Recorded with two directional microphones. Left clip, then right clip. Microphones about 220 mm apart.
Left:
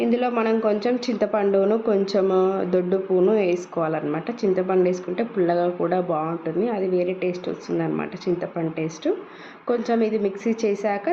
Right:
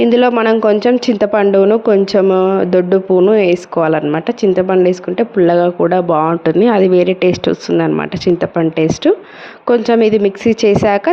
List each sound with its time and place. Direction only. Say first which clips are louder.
0.0 s speech: right 11 dB; 40° right (ahead or behind)